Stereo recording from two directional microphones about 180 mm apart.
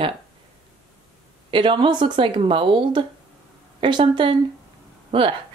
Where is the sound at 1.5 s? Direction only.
25° right (ahead or behind).